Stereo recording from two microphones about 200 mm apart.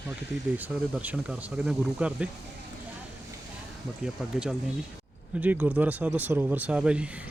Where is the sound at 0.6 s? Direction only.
10° right (ahead or behind).